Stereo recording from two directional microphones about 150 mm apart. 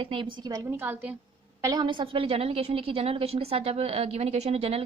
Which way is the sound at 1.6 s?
25° right (ahead or behind).